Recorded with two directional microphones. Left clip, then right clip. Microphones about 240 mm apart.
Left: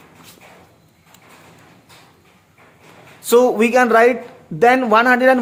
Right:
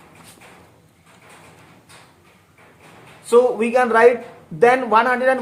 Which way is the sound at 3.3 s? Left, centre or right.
Left.